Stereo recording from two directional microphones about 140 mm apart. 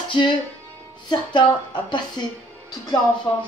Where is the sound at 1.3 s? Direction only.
30° left (ahead or behind).